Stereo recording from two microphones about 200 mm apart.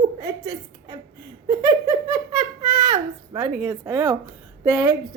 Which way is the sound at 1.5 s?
20° right (ahead or behind).